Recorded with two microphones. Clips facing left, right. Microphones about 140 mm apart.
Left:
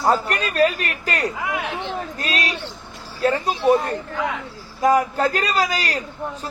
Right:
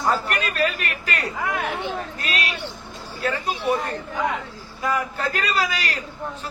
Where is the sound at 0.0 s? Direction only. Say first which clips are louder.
Left 3 dB; 35° left (ahead or behind).